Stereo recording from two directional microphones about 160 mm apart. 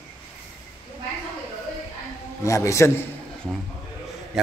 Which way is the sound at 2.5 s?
20° left (ahead or behind).